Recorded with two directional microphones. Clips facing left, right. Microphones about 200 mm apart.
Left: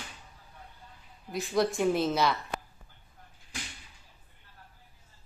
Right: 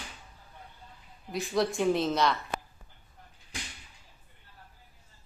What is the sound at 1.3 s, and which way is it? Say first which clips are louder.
A woman's voice: left 1 dB; centre (ahead or behind).